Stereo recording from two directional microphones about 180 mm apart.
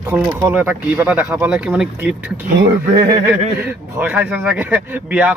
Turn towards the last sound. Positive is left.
turn(degrees=-10)  # may be behind; listen again after turning